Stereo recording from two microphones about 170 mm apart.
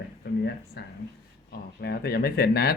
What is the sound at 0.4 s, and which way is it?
Speech, 75° left (ahead or behind).